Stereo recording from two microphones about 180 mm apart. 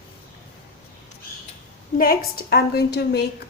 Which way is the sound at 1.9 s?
55° left (ahead or behind).